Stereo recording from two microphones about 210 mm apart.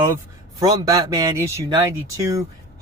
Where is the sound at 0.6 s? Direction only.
15° right (ahead or behind).